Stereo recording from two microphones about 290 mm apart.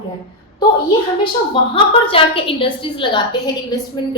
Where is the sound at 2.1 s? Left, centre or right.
Centre.